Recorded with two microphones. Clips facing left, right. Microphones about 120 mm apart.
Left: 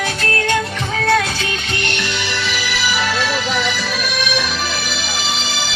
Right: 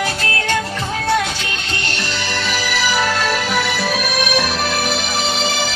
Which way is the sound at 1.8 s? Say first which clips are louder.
Even; 40° right (ahead or behind).